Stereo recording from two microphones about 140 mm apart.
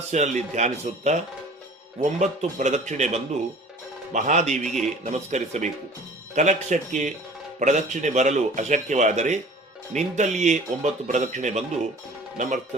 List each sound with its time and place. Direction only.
0.1 s speech: 55° right (ahead or behind)